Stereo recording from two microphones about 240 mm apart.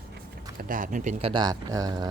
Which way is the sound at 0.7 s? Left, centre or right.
Right.